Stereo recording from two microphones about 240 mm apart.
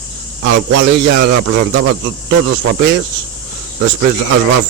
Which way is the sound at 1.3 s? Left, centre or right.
Right.